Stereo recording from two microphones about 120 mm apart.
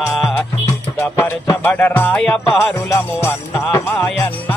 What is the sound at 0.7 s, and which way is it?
Music, 20° left (ahead or behind).